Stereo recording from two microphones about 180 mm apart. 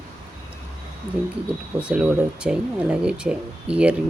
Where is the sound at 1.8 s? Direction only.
5° right (ahead or behind).